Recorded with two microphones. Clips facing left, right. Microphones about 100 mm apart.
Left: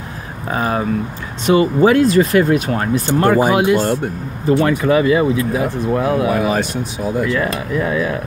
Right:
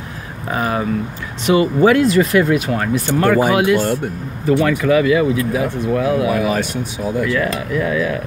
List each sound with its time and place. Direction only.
0.5 s speech: 30° left (ahead or behind)